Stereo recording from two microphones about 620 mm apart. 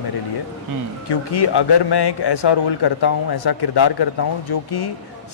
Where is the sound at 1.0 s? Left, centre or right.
Left.